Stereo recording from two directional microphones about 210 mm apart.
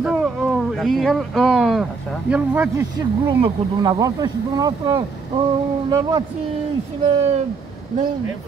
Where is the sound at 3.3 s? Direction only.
25° right (ahead or behind).